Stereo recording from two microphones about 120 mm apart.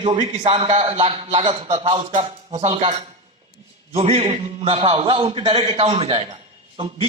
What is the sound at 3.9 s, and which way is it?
A man's voice, 55° right (ahead or behind).